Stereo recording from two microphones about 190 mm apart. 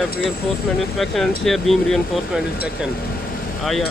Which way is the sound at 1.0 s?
Centre (ahead or behind).